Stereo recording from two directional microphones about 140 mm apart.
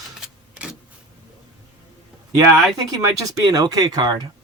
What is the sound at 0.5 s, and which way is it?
Vehicle, 5° right (ahead or behind).